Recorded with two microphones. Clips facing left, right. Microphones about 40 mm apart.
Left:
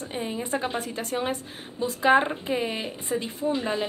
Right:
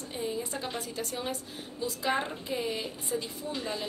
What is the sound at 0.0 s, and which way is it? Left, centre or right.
A woman's voice, left.